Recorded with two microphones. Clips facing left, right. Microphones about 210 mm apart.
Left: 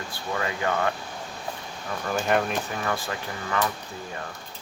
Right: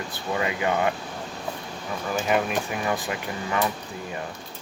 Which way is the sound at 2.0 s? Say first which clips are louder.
Even; 5° right (ahead or behind).